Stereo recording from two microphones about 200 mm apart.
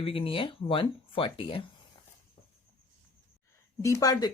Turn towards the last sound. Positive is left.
turn(degrees=20)  # may be behind; listen again after turning